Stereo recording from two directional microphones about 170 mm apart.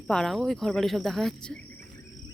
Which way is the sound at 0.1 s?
Centre (ahead or behind).